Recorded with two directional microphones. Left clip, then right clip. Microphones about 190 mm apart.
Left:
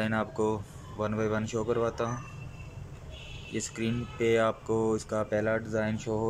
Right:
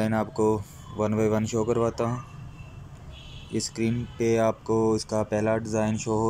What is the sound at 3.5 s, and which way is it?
Speech, 5° right (ahead or behind).